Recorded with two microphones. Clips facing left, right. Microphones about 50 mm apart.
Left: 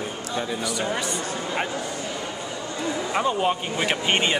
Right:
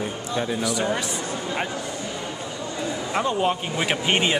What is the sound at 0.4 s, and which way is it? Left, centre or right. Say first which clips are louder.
Speech: right 3 dB; centre.